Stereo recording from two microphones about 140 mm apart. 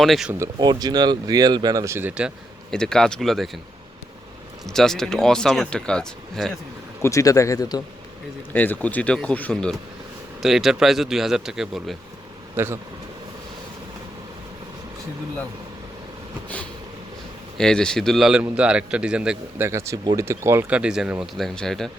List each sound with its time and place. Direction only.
0.0 s speech: centre (ahead or behind)
0.3 s speech: 30° right (ahead or behind); by 2.3 s 10° right (ahead or behind)
2.6 s speech: 5° left (ahead or behind)
4.6 s speech: 5° left (ahead or behind)
7.0 s speech: 25° left (ahead or behind)
8.5 s speech: 10° left (ahead or behind)
12.5 s speech: 15° right (ahead or behind)
17.6 s speech: 5° left (ahead or behind)
19.5 s speech: 20° right (ahead or behind); by 21.8 s 5° left (ahead or behind)